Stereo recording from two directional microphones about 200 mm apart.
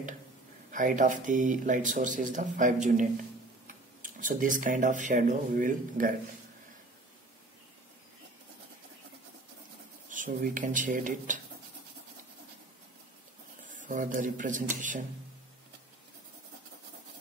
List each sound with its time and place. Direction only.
0.7 s speech: 40° right (ahead or behind)
10.0 s speech: 40° right (ahead or behind)
13.7 s speech: 40° right (ahead or behind)